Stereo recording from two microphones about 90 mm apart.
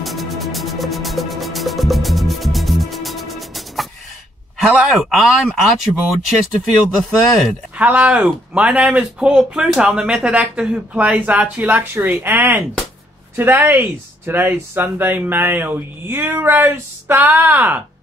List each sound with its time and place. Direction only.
0.0 s music: centre (ahead or behind)
4.9 s speech: centre (ahead or behind)
7.7 s speech: 15° right (ahead or behind)